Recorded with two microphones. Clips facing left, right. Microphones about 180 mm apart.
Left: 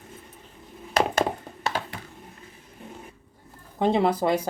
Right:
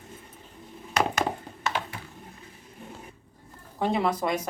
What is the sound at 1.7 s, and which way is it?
Computer keyboard, 35° left (ahead or behind).